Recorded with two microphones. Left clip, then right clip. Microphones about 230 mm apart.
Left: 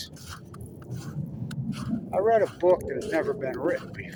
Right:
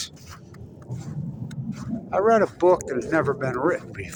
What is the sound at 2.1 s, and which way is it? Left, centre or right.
Speech, right.